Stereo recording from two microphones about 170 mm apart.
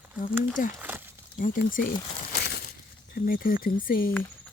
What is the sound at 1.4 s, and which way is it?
Speech, 55° left (ahead or behind).